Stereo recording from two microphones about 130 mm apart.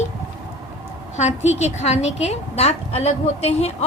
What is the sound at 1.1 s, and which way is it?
A woman's voice, 60° left (ahead or behind).